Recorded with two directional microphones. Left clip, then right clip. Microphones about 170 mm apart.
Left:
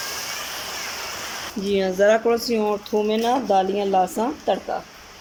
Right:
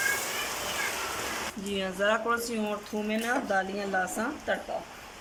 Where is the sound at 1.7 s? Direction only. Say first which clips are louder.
Left 10 dB; 35° left (ahead or behind).